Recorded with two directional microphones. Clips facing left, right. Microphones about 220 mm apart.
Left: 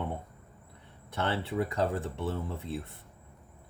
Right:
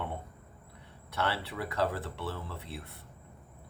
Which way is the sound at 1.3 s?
20° left (ahead or behind).